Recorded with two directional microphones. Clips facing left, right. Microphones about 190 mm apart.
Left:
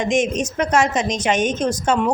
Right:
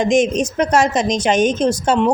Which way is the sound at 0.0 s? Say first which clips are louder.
Right 4 dB; 35° right (ahead or behind).